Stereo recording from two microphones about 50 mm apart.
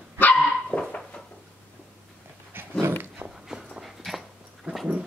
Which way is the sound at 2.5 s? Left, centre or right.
Right.